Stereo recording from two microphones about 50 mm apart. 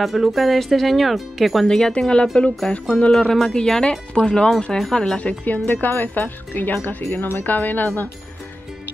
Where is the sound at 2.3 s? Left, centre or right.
Centre.